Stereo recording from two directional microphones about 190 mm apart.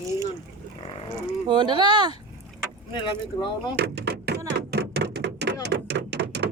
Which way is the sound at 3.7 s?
60° right (ahead or behind).